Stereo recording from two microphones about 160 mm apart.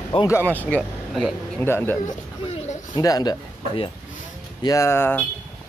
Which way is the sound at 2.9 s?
25° left (ahead or behind).